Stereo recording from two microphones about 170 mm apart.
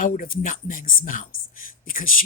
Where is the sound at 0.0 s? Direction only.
55° left (ahead or behind).